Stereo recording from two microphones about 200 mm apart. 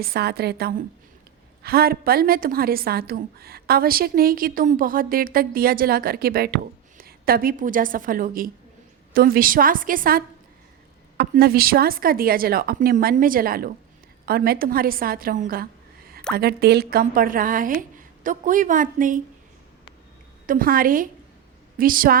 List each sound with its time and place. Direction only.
0.0 s a woman's voice: 50° right (ahead or behind)
20.5 s a woman's voice: 45° right (ahead or behind)